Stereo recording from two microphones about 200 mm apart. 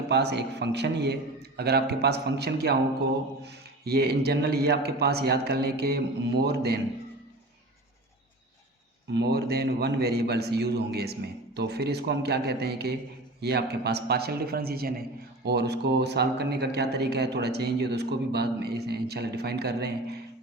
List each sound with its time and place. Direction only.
0.1 s a man's voice: 55° right (ahead or behind)
9.1 s a man's voice: 55° right (ahead or behind)